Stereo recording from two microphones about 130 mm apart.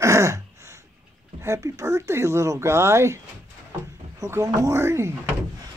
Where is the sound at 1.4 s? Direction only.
25° right (ahead or behind).